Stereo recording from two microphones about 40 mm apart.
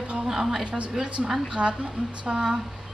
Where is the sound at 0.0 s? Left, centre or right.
Right.